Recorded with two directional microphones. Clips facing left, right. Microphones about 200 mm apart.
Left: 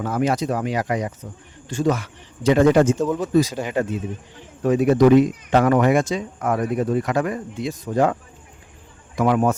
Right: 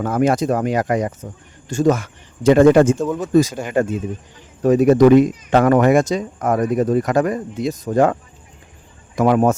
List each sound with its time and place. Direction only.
0.0 s speech: 50° right (ahead or behind)